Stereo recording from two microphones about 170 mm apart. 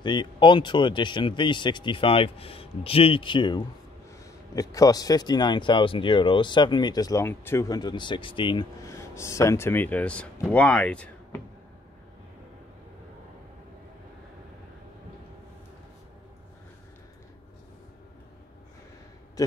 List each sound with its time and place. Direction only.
0.0 s speech: 25° left (ahead or behind)
8.8 s speech: 15° left (ahead or behind)